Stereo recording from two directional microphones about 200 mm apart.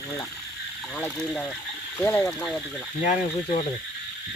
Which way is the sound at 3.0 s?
35° left (ahead or behind).